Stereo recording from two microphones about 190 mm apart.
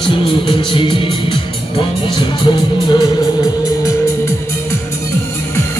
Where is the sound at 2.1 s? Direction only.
25° left (ahead or behind).